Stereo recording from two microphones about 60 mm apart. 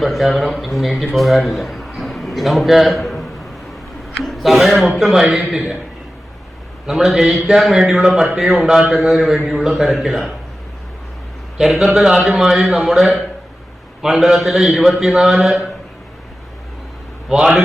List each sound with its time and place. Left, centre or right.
0.0 s a man's voice: centre
6.8 s a man's voice: centre
11.5 s a man's voice: centre
17.2 s a man's voice: centre